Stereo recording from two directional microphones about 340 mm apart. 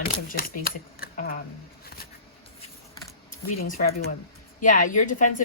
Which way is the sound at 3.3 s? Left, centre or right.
Left.